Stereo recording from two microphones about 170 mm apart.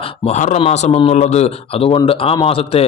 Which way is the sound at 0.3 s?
40° left (ahead or behind).